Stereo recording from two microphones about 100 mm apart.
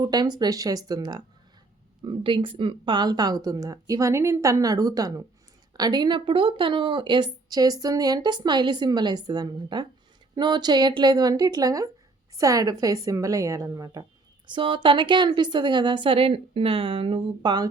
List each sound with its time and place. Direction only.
0.0 s speech: 45° right (ahead or behind)
2.0 s speech: 55° right (ahead or behind); by 14.1 s 35° right (ahead or behind)
14.4 s a woman's voice: 55° right (ahead or behind)